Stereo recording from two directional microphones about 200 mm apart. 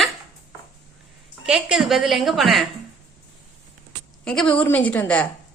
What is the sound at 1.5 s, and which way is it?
A woman's voice, 5° right (ahead or behind).